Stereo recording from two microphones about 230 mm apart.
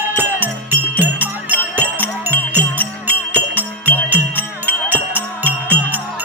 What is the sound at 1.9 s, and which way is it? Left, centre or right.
Music, centre.